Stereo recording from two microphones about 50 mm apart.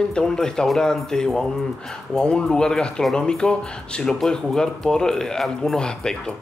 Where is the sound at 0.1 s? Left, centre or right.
Centre.